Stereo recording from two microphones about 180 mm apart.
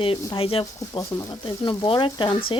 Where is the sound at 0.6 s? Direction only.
20° left (ahead or behind).